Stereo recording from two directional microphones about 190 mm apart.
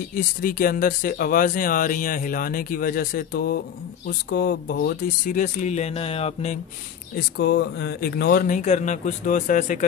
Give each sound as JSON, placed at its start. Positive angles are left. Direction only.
{"t": 0.4, "sound": "speech", "side_deg": 50}
{"t": 5.2, "sound": "speech", "side_deg": 40}
{"t": 7.3, "sound": "speech", "side_deg": 60}